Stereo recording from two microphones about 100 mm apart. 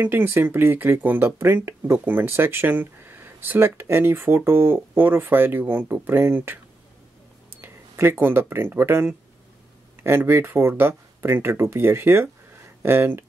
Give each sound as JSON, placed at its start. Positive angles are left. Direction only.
{"t": 0.0, "sound": "speech", "side_deg": -20}
{"t": 7.6, "sound": "speech", "side_deg": -25}